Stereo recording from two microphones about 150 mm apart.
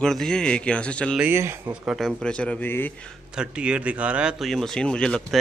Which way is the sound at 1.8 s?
Centre (ahead or behind).